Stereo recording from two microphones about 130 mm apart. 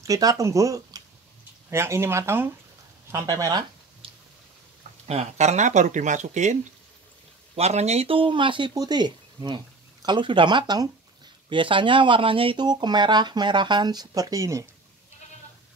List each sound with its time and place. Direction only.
0.0 s speech: 25° right (ahead or behind)
5.0 s speech: 55° right (ahead or behind)
7.5 s speech: 55° right (ahead or behind); by 14.7 s 25° right (ahead or behind)